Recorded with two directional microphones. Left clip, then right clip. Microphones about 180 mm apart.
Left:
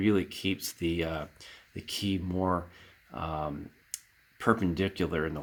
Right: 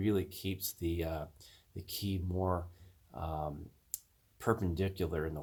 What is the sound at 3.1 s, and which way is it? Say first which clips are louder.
Speech: left 5 dB; 15° left (ahead or behind).